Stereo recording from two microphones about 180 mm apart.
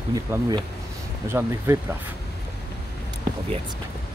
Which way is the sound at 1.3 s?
15° right (ahead or behind).